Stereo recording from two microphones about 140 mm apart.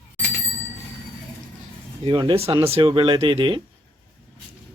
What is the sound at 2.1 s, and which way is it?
A man's voice, 35° right (ahead or behind).